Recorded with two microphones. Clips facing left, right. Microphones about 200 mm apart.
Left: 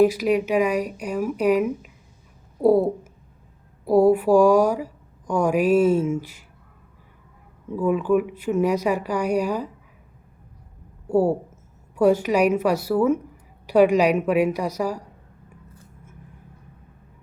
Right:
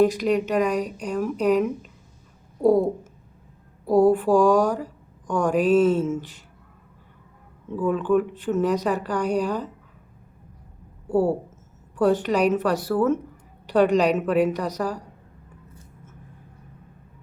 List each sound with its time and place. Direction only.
0.0 s speech: 10° left (ahead or behind)
7.7 s speech: 10° left (ahead or behind)
11.1 s speech: 10° left (ahead or behind)